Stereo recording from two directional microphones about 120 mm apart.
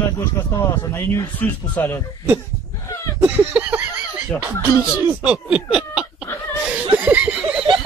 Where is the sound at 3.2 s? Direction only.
15° right (ahead or behind).